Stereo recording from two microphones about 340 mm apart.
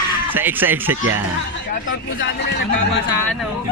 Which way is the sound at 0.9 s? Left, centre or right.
Right.